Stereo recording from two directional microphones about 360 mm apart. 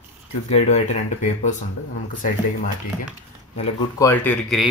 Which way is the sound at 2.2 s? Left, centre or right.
Left.